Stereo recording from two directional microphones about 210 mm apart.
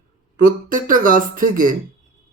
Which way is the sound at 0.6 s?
40° right (ahead or behind).